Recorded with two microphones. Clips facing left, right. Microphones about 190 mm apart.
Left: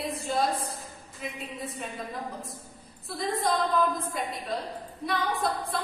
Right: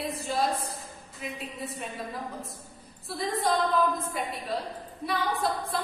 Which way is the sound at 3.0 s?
Centre (ahead or behind).